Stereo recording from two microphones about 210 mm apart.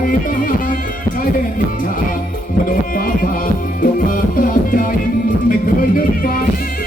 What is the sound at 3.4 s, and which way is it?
Music, 40° left (ahead or behind).